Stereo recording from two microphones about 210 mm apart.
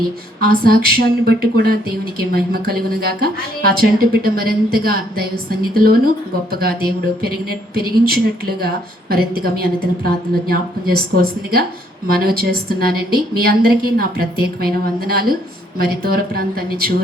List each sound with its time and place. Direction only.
0.3 s speech: 45° right (ahead or behind)